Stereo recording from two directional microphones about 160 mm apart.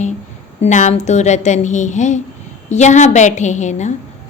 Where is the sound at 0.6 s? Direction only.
50° left (ahead or behind).